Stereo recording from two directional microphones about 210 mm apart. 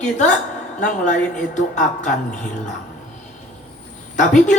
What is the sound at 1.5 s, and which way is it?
Speech, 35° left (ahead or behind).